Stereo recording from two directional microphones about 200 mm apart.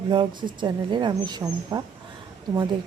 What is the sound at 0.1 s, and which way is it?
Speech, 25° right (ahead or behind).